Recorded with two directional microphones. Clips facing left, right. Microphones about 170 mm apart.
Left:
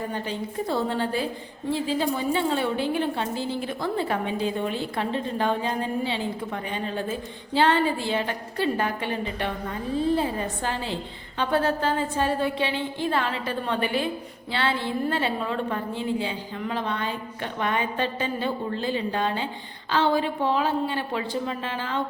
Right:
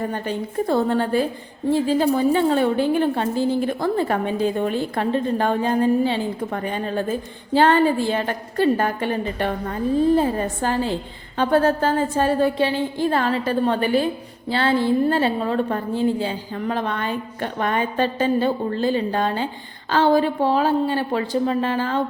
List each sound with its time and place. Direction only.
0.1 s a woman's voice: 50° right (ahead or behind)